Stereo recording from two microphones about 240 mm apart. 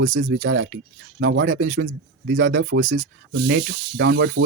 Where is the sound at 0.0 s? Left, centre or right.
Right.